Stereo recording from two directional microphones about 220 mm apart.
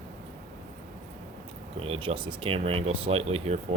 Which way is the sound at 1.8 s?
25° right (ahead or behind).